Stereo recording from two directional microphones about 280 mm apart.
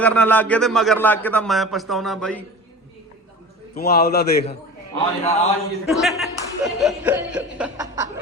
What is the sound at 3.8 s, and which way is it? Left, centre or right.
Speech, left.